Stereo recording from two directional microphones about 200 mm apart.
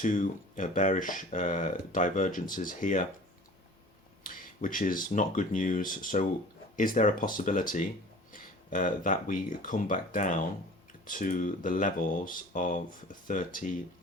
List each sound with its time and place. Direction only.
0.0 s speech: 40° left (ahead or behind)
4.2 s speech: 45° left (ahead or behind)